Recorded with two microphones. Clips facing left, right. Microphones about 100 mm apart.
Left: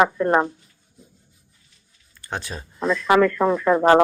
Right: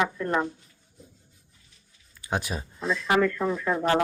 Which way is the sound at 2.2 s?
10° right (ahead or behind).